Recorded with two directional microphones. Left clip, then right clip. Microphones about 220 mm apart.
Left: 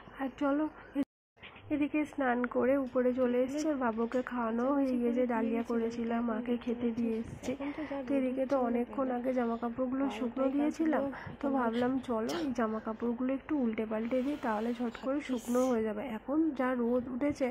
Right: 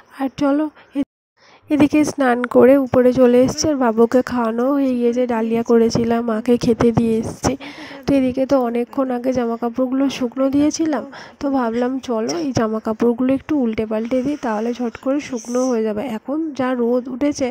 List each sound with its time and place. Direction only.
0.2 s speech: 50° right (ahead or behind)
3.5 s speech: 45° right (ahead or behind)
8.5 s a woman's voice: 40° right (ahead or behind)